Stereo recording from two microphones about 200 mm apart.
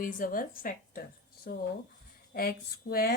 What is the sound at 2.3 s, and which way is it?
Speech, 50° left (ahead or behind).